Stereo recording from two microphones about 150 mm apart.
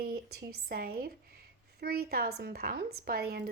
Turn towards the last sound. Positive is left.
turn(degrees=-90)